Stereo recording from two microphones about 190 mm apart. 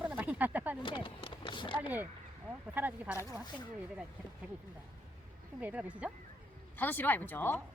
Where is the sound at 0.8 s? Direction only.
25° left (ahead or behind).